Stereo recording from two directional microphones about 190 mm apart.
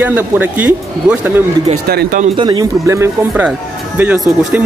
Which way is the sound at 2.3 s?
25° right (ahead or behind).